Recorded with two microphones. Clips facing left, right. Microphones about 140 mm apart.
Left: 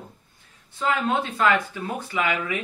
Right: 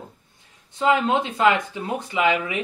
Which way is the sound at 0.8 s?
20° right (ahead or behind).